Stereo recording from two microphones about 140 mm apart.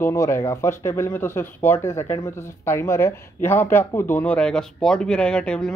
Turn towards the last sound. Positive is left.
turn(degrees=5)  # may be behind; listen again after turning